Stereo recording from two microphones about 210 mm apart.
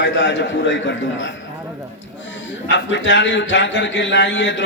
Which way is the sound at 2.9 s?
60° left (ahead or behind).